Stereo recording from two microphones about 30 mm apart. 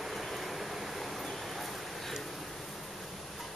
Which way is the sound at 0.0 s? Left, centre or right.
Centre.